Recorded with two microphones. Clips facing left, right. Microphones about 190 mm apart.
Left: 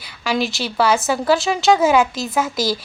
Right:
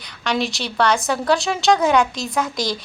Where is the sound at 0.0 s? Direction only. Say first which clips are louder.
Left 1 dB; 5° left (ahead or behind).